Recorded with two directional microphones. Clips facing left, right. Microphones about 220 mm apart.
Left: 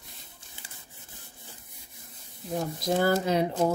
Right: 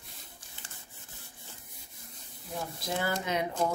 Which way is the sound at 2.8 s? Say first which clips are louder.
Left 8 dB; 40° left (ahead or behind).